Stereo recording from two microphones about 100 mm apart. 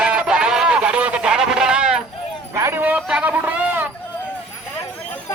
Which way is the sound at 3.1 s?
15° right (ahead or behind).